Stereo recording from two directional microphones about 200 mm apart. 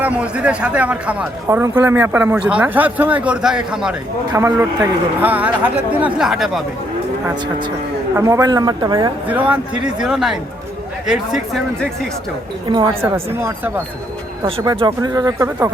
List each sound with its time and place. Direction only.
0.0 s speech: 5° right (ahead or behind)
4.3 s speech: 15° right (ahead or behind)
8.1 s speech: 15° right (ahead or behind)
9.2 s speech: 5° right (ahead or behind)
12.6 s speech: 25° right (ahead or behind)
13.0 s speech: 10° right (ahead or behind)
14.4 s speech: 25° right (ahead or behind)